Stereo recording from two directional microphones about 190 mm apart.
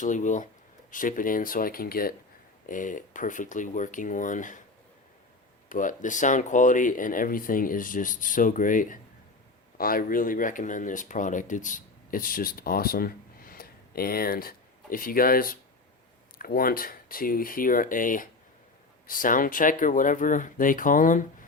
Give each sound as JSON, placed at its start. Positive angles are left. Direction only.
{"t": 0.0, "sound": "speech", "side_deg": 40}
{"t": 5.6, "sound": "speech", "side_deg": 45}